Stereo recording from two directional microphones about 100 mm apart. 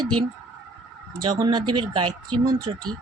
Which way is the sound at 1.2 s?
50° right (ahead or behind).